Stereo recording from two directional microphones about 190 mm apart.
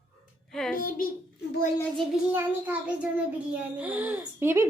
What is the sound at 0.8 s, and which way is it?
Speech, 45° left (ahead or behind).